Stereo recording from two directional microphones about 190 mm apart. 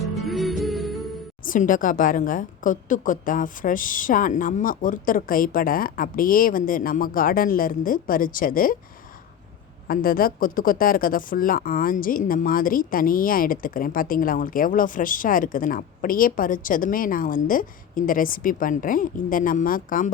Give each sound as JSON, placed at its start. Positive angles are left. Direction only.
{"t": 0.0, "sound": "music", "side_deg": 0}
{"t": 1.5, "sound": "speech", "side_deg": 45}
{"t": 9.8, "sound": "speech", "side_deg": 50}